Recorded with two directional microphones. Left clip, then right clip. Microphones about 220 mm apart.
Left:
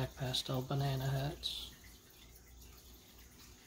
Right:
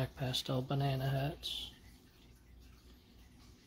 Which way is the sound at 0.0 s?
25° right (ahead or behind).